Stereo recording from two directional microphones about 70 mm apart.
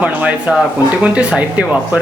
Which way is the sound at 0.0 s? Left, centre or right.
Centre.